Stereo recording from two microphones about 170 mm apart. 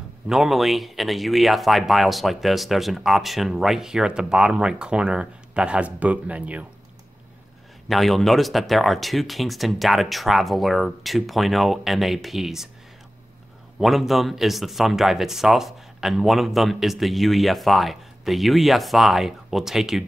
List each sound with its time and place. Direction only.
0.3 s speech: centre (ahead or behind)
7.9 s speech: centre (ahead or behind)
13.7 s speech: centre (ahead or behind)